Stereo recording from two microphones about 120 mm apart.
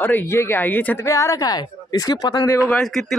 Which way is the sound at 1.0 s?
25° left (ahead or behind).